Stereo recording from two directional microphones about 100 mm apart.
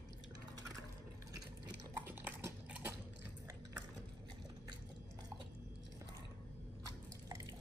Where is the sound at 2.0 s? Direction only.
20° right (ahead or behind).